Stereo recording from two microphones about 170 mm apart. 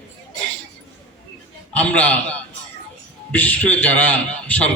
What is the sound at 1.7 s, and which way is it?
Speech, 10° left (ahead or behind).